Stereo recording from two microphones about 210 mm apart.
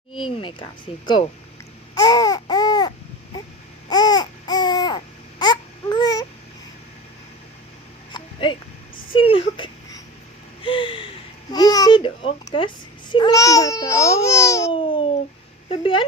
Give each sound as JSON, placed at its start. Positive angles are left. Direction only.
{"t": 0.9, "sound": "speech", "side_deg": 25}
{"t": 2.0, "sound": "baby cry", "side_deg": 20}
{"t": 3.8, "sound": "babbling", "side_deg": 20}
{"t": 8.1, "sound": "a sound", "side_deg": 25}
{"t": 9.1, "sound": "whimper", "side_deg": 25}
{"t": 10.6, "sound": "gasp", "side_deg": 25}
{"t": 11.5, "sound": "babbling", "side_deg": 20}
{"t": 15.7, "sound": "a sound", "side_deg": 25}